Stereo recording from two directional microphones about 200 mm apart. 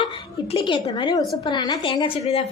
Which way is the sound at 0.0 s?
25° left (ahead or behind).